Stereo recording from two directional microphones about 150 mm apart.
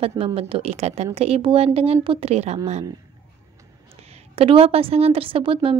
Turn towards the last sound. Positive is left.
turn(degrees=-35)  # may be behind; listen again after turning